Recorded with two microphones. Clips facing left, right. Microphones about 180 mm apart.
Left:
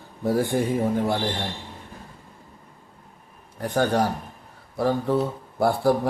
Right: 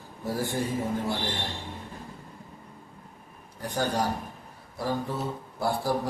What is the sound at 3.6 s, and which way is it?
Speech, 60° left (ahead or behind).